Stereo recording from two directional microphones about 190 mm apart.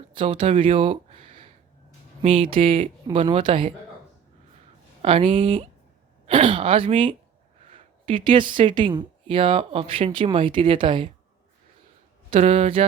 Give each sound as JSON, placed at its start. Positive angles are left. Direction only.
{"t": 0.1, "sound": "speech", "side_deg": -25}
{"t": 2.2, "sound": "speech", "side_deg": -30}
{"t": 5.0, "sound": "speech", "side_deg": -30}
{"t": 12.3, "sound": "speech", "side_deg": -30}